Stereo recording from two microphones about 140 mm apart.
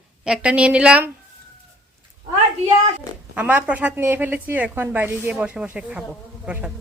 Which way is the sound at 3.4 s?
10° right (ahead or behind).